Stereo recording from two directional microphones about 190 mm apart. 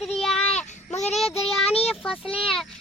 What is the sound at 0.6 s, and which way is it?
Child singing, 35° left (ahead or behind).